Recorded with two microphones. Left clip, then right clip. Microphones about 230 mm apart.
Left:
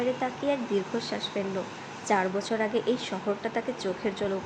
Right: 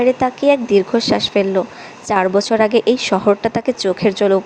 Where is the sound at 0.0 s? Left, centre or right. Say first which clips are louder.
Right 15 dB; right.